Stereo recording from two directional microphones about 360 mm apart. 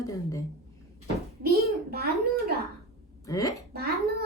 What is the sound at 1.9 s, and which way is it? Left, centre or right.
Speech, right.